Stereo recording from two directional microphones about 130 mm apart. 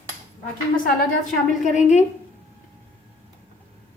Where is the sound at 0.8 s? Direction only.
75° left (ahead or behind).